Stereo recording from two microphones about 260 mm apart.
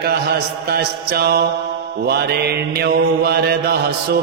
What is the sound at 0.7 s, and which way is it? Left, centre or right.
Mantra, right.